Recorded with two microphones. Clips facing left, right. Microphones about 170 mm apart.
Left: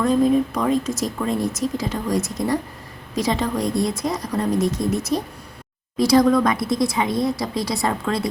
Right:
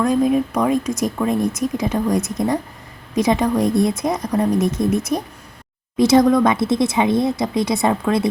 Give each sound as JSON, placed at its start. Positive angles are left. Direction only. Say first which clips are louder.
{"t": 0.1, "sound": "speech", "louder": "even", "side_deg": -15}